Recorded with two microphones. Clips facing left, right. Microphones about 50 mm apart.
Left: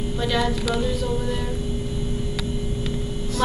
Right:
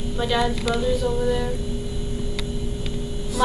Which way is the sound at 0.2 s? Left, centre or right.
Centre.